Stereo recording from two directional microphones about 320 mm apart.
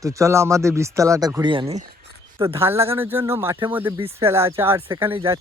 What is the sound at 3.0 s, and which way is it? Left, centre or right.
Speech, centre.